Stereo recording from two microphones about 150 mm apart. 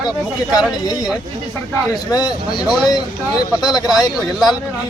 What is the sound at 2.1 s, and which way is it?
Speech, 25° left (ahead or behind).